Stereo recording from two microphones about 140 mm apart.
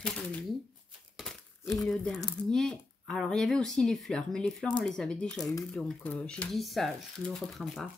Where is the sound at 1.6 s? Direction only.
20° left (ahead or behind).